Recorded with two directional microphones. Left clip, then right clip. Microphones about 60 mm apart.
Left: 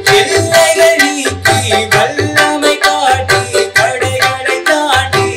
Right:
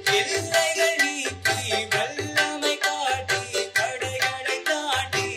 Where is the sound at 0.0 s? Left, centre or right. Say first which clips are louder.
Left 14 dB; left.